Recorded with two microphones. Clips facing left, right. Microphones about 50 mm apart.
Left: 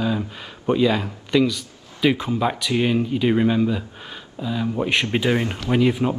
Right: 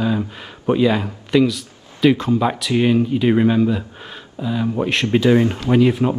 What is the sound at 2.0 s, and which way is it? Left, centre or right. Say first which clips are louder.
Speech: right 4 dB; centre.